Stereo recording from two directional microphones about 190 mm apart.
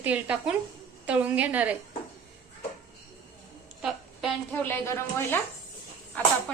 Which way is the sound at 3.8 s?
5° right (ahead or behind).